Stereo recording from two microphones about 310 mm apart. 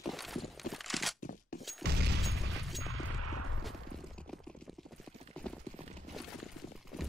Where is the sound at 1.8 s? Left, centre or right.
Right.